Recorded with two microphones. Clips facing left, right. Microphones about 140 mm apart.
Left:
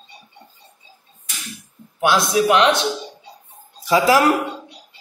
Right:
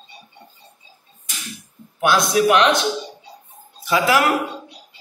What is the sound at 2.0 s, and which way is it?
Speech, 25° left (ahead or behind).